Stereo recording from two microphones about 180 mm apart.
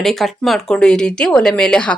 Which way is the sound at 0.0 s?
Centre (ahead or behind).